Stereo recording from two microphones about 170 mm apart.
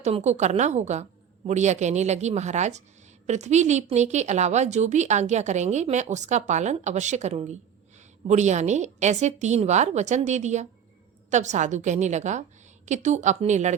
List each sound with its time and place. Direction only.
0.0 s a woman's voice: 40° right (ahead or behind)